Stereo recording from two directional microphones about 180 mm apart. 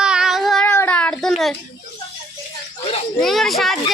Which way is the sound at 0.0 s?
5° right (ahead or behind).